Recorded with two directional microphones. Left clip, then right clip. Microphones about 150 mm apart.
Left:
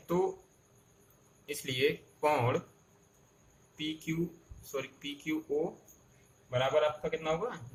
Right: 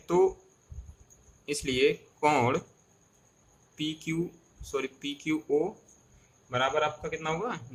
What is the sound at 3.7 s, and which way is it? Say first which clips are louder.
Speech: right 4 dB; 45° right (ahead or behind).